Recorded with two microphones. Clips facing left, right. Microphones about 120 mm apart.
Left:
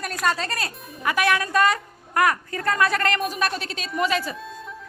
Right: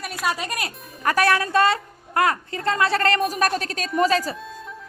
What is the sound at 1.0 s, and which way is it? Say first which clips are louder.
A woman's voice: right 2 dB; 40° right (ahead or behind).